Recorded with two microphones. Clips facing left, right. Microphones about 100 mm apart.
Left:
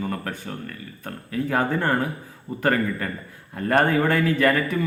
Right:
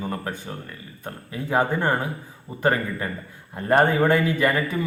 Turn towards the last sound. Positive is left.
turn(degrees=-20)  # may be behind; listen again after turning